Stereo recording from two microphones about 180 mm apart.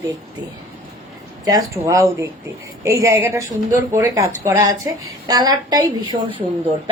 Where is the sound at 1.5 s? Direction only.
20° right (ahead or behind).